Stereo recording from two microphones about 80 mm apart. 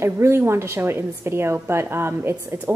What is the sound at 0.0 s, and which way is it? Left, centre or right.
A woman's voice, right.